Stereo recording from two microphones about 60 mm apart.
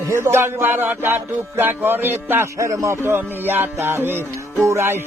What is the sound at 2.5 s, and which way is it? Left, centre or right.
Speech, right.